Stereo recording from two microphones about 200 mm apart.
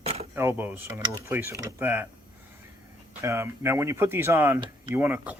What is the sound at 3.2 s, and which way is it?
Speech, 15° right (ahead or behind).